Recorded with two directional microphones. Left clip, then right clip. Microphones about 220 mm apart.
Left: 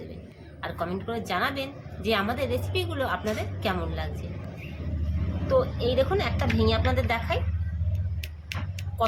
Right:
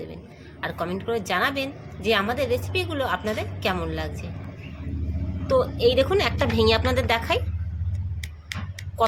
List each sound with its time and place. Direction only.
0.6 s a woman's voice: 30° right (ahead or behind)
5.5 s a woman's voice: 35° right (ahead or behind)